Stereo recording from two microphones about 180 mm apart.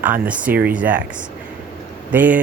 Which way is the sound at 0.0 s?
10° right (ahead or behind).